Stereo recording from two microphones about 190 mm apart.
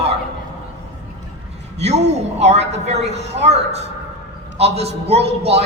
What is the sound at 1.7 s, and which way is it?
A man's voice, 35° right (ahead or behind).